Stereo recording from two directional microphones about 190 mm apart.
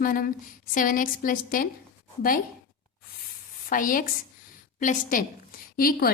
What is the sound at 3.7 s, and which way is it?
A woman's voice, 45° left (ahead or behind).